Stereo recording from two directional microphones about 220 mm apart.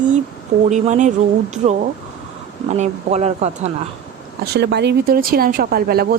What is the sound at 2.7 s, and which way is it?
Speech, 30° right (ahead or behind).